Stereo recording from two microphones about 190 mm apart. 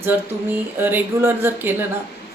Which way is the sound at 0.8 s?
10° right (ahead or behind).